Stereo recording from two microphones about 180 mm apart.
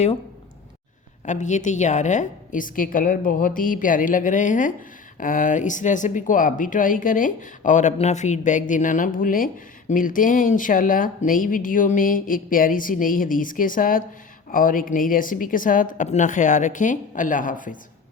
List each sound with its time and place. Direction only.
1.2 s a woman's voice: 40° left (ahead or behind)